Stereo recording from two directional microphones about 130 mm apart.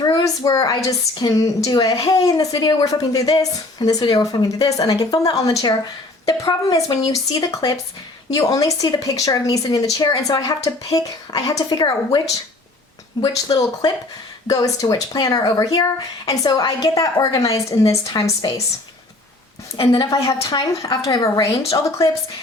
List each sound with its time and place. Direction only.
0.0 s speech: 30° left (ahead or behind)
14.4 s speech: 25° left (ahead or behind)
19.7 s a woman's voice: 35° left (ahead or behind)